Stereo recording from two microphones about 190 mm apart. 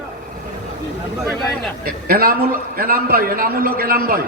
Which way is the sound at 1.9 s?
50° right (ahead or behind).